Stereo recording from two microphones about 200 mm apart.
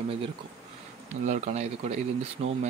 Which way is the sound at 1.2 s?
35° right (ahead or behind).